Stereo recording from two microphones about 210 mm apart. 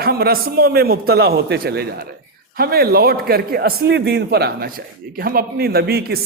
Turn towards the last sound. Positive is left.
turn(degrees=-50)  # may be behind; listen again after turning